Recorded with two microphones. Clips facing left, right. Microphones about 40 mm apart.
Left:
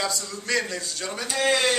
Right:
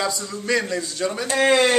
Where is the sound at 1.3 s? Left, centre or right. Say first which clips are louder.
Right 5 dB; right.